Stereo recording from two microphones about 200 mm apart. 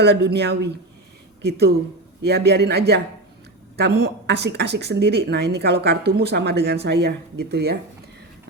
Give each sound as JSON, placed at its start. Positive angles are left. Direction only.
{"t": 0.0, "sound": "a woman's voice", "side_deg": -60}